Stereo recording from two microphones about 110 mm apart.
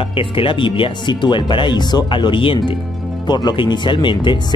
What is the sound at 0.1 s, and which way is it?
Speech, 55° left (ahead or behind).